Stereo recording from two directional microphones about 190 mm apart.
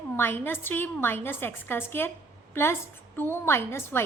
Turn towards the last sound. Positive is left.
turn(degrees=10)  # may be behind; listen again after turning